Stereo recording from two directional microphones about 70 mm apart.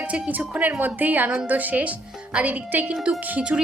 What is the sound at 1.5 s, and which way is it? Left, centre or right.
Speech, right.